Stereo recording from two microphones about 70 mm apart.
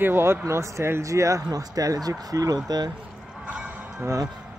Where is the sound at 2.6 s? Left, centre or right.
Right.